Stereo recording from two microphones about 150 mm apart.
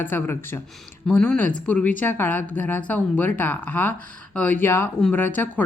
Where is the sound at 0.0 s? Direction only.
15° left (ahead or behind).